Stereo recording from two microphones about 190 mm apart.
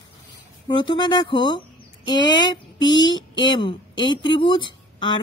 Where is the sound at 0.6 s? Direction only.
25° left (ahead or behind).